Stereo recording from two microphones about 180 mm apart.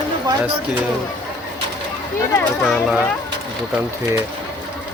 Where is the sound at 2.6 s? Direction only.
Centre (ahead or behind).